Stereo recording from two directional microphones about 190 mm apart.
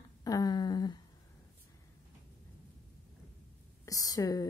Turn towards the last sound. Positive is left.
turn(degrees=20)  # may be behind; listen again after turning